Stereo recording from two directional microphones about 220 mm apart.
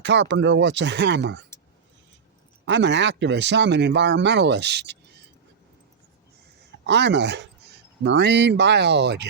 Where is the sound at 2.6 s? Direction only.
55° right (ahead or behind).